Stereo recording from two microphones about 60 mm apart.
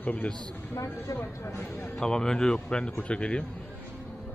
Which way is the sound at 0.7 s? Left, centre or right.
Left.